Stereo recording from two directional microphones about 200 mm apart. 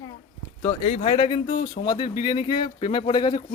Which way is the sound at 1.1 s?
25° left (ahead or behind).